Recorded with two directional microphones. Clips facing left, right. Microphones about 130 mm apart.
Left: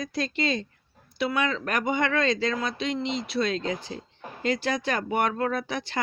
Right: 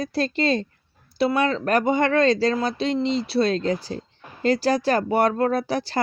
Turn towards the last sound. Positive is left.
turn(degrees=-35)  # may be behind; listen again after turning